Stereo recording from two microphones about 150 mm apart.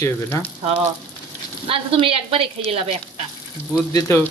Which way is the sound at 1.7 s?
40° right (ahead or behind).